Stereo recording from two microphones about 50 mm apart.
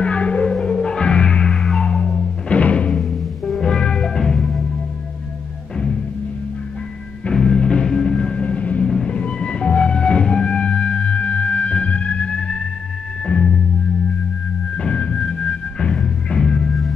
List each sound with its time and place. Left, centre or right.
0.0 s music: left
2.5 s music: left
2.9 s music: centre
7.2 s music: centre
8.8 s music: centre
14.8 s music: centre